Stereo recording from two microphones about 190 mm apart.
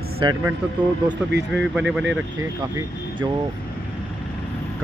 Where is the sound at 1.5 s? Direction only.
5° right (ahead or behind).